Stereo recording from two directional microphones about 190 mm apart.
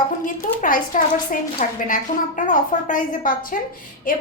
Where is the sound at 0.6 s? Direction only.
45° left (ahead or behind).